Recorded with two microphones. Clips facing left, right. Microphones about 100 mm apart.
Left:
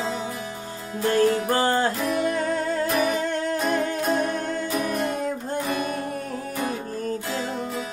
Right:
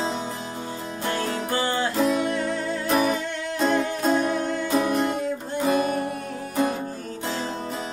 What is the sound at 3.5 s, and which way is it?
Music, 30° right (ahead or behind).